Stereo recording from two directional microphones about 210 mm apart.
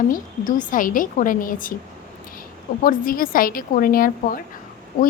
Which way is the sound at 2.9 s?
40° left (ahead or behind).